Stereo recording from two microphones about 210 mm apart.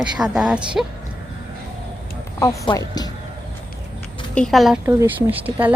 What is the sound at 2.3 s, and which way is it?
Speech, 15° left (ahead or behind).